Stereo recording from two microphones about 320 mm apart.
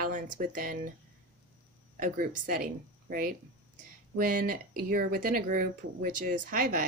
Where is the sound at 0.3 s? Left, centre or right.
Right.